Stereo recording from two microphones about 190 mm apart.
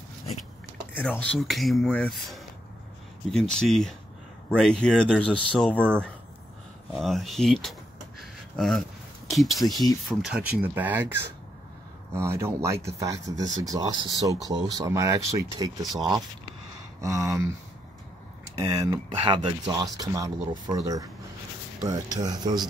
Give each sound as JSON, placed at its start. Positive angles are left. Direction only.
{"t": 0.9, "sound": "speech", "side_deg": 10}
{"t": 8.2, "sound": "a sound", "side_deg": 0}
{"t": 9.3, "sound": "speech", "side_deg": 0}
{"t": 17.0, "sound": "speech", "side_deg": -15}
{"t": 18.7, "sound": "speech", "side_deg": -20}